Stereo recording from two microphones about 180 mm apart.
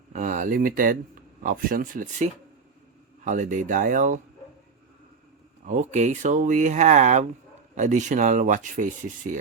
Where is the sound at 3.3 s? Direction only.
45° right (ahead or behind).